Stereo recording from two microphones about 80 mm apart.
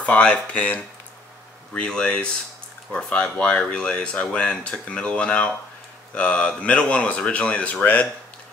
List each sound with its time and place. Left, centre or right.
0.0 s speech: centre